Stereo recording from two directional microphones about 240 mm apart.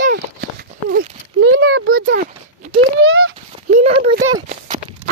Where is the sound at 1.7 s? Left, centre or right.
Right.